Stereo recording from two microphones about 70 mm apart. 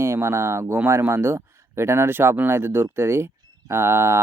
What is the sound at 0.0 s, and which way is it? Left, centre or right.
Speech, right.